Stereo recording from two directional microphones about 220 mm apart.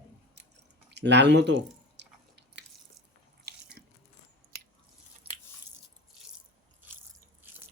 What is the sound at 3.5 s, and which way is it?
Biting, 45° right (ahead or behind).